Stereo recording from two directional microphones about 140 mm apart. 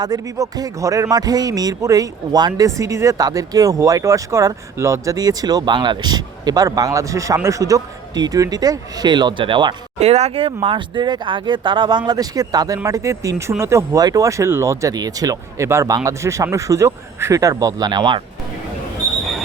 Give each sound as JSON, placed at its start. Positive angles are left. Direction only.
{"t": 0.0, "sound": "speech", "side_deg": -25}
{"t": 10.0, "sound": "speech", "side_deg": -50}